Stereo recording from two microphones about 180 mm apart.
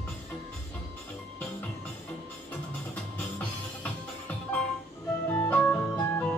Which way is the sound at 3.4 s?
5° left (ahead or behind).